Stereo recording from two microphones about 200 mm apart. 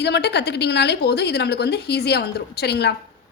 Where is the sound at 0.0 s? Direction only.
60° left (ahead or behind).